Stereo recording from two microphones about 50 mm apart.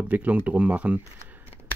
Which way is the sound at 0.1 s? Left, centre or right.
Right.